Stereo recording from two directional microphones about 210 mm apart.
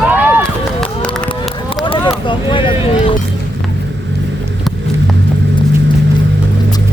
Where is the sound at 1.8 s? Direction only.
25° left (ahead or behind).